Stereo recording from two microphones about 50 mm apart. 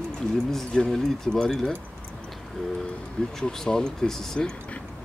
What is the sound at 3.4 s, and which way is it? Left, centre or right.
Speech, centre.